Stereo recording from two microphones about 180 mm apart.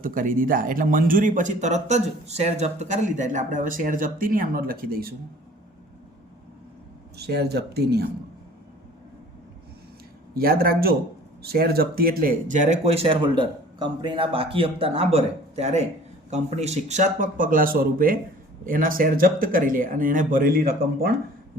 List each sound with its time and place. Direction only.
0.0 s speech: 50° right (ahead or behind)
7.2 s speech: 65° right (ahead or behind)
10.3 s speech: 55° right (ahead or behind)